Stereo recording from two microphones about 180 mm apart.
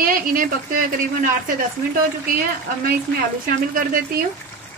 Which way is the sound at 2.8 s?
55° right (ahead or behind).